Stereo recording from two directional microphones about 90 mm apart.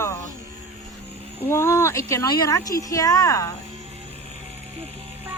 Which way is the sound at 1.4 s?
30° left (ahead or behind).